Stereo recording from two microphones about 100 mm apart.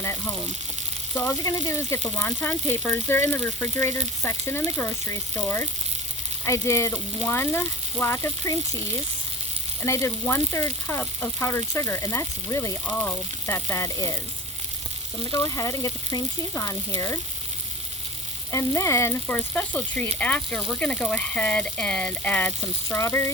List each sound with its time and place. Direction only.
0.0 s frying: 25° left (ahead or behind)
1.1 s speech: 30° left (ahead or behind)
9.8 s speech: 30° left (ahead or behind)
12.8 s speech: 20° left (ahead or behind)
15.3 s speech: 35° left (ahead or behind)
18.5 s speech: 30° left (ahead or behind)
19.3 s speech: 15° left (ahead or behind)
22.9 s speech: 30° left (ahead or behind)